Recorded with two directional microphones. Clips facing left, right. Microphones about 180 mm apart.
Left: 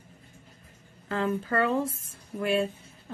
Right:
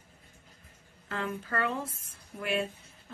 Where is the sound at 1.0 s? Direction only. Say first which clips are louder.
Left 7 dB; 30° left (ahead or behind).